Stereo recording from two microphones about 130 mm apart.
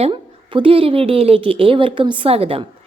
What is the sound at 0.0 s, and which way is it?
Speech, 40° right (ahead or behind).